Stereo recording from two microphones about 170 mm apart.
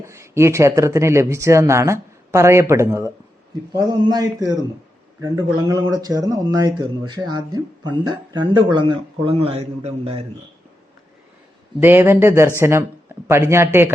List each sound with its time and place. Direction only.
0.0 s speech: 15° right (ahead or behind); by 10.2 s 35° right (ahead or behind)
11.8 s speech: 10° right (ahead or behind)